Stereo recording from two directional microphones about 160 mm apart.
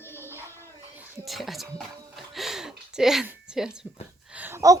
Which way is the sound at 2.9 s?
5° right (ahead or behind).